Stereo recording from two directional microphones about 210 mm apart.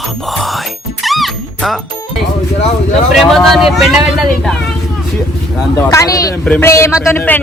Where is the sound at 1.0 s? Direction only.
Centre (ahead or behind).